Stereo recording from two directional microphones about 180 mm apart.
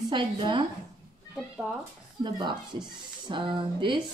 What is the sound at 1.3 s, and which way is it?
Speech, 5° right (ahead or behind).